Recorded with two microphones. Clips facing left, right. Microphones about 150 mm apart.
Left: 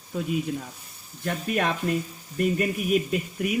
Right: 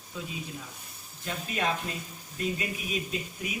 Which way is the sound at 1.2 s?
60° left (ahead or behind).